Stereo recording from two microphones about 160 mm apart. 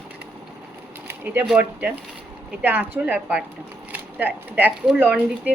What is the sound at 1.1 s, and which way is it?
Speech, 10° right (ahead or behind).